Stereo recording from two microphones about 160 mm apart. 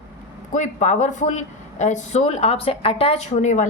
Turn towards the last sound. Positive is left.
turn(degrees=50)  # may be behind; listen again after turning